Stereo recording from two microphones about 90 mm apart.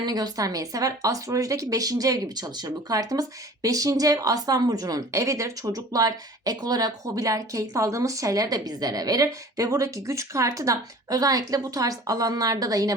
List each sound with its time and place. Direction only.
0.0 s speech: 45° right (ahead or behind)